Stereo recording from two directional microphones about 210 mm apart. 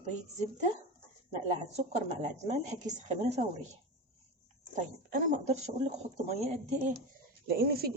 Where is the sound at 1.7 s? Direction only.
30° right (ahead or behind).